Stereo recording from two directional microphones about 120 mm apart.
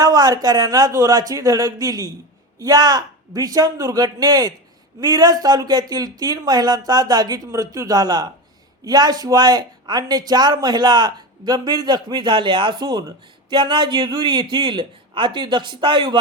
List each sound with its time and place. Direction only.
0.0 s speech: 30° right (ahead or behind)